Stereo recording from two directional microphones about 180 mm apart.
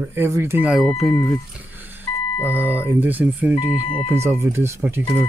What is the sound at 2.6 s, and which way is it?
Speech, 10° right (ahead or behind).